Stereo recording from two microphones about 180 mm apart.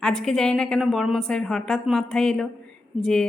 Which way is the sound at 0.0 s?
Centre (ahead or behind).